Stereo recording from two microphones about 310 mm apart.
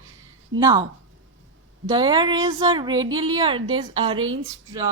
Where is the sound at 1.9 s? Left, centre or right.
Centre.